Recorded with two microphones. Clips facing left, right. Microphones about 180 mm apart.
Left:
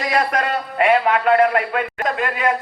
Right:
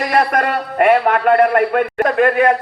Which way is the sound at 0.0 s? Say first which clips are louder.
Right 4 dB; 60° right (ahead or behind).